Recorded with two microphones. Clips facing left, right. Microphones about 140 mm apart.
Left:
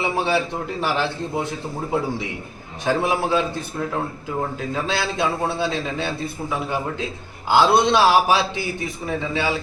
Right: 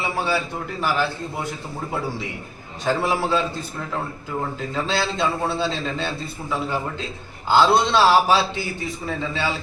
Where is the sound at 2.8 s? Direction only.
15° left (ahead or behind).